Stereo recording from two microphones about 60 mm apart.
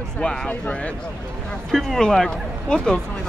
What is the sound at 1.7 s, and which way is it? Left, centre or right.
Speech, centre.